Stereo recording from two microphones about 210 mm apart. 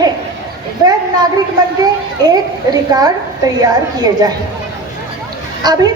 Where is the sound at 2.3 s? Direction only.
20° right (ahead or behind).